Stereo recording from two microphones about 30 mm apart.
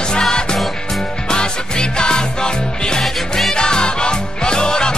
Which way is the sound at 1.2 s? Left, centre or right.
Left.